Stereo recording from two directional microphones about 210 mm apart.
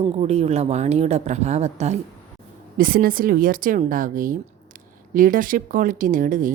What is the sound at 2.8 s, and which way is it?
A woman's voice, 45° right (ahead or behind).